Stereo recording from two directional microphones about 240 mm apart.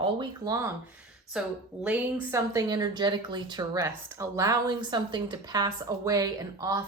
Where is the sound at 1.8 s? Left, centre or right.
Centre.